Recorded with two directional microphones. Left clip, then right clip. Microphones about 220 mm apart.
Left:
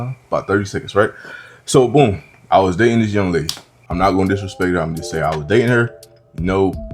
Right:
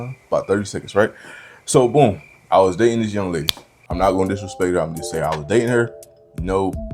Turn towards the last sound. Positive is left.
turn(degrees=30)  # may be behind; listen again after turning